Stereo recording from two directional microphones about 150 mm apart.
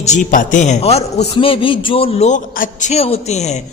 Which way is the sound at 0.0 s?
55° left (ahead or behind).